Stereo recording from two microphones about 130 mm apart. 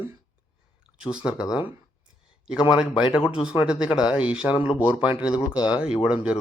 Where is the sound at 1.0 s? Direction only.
5° right (ahead or behind).